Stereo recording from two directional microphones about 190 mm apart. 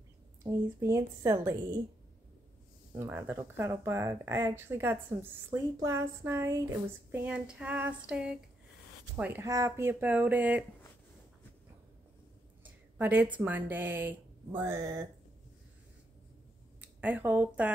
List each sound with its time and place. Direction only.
0.4 s speech: 15° right (ahead or behind)
3.0 s speech: 10° right (ahead or behind)
7.2 s female singing: 5° right (ahead or behind)
9.1 s speech: 10° right (ahead or behind)
12.9 s speech: 10° right (ahead or behind)
16.8 s speech: 10° right (ahead or behind)